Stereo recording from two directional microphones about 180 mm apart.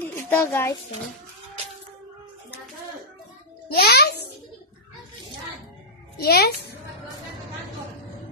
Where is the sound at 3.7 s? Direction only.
60° left (ahead or behind).